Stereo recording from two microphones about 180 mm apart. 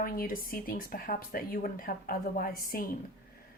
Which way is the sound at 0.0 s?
50° left (ahead or behind).